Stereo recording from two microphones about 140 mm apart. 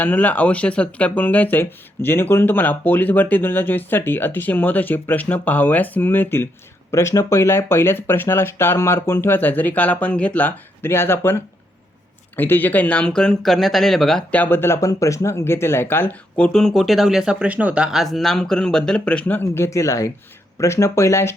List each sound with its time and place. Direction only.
0.0 s speech: 10° left (ahead or behind)